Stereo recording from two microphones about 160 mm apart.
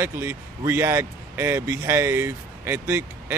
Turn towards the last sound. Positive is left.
turn(degrees=-15)  # may be behind; listen again after turning